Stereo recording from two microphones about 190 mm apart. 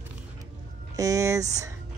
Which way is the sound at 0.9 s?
15° right (ahead or behind).